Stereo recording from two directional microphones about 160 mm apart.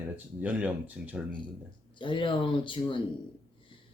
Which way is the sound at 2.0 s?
30° left (ahead or behind).